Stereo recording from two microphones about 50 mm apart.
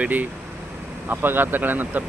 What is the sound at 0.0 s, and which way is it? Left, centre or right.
Speech, right.